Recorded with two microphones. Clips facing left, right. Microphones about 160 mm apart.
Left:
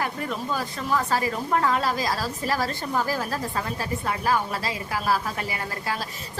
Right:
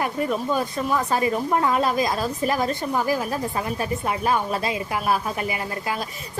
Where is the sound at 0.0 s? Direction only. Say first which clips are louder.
Right 5 dB; 20° right (ahead or behind).